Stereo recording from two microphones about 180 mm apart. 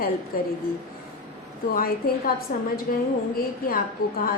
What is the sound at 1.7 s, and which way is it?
A woman's voice, 55° left (ahead or behind).